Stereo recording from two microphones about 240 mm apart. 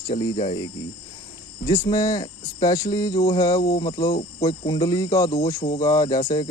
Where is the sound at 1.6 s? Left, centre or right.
Centre.